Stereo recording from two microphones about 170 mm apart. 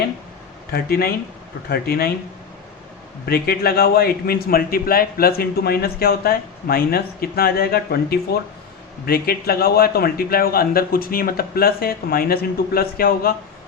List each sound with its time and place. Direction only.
0.7 s a man's voice: 65° left (ahead or behind)
3.2 s a man's voice: 65° left (ahead or behind)